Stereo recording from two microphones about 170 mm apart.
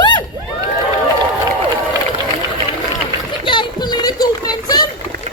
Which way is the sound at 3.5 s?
25° left (ahead or behind).